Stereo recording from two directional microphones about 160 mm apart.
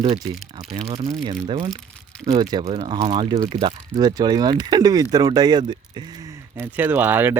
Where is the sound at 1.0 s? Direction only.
30° right (ahead or behind).